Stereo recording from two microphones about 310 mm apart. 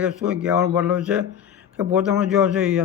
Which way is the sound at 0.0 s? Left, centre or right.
Centre.